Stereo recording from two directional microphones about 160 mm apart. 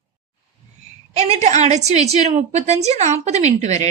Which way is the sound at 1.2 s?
45° right (ahead or behind).